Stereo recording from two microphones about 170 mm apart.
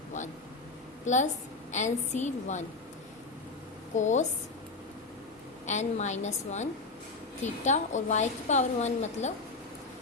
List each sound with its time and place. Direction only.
1.0 s a woman's voice: 45° left (ahead or behind)
3.9 s a woman's voice: 45° left (ahead or behind)
5.6 s a woman's voice: 45° left (ahead or behind)